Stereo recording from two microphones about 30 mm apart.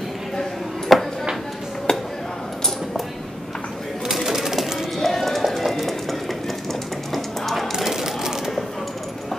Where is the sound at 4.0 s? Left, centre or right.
Centre.